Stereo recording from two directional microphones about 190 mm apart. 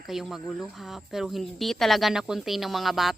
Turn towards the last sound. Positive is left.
turn(degrees=0)  # may be behind; listen again after turning